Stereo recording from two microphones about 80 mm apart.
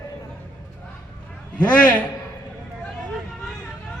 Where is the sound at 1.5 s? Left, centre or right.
Centre.